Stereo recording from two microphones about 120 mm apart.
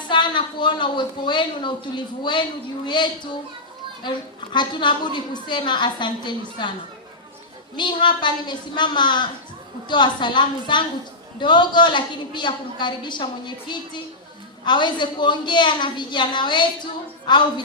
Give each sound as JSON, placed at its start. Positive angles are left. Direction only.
{"t": 0.1, "sound": "a woman's voice", "side_deg": 40}
{"t": 7.8, "sound": "a woman's voice", "side_deg": 40}